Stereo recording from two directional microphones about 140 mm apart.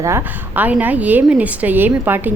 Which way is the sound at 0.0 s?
15° right (ahead or behind).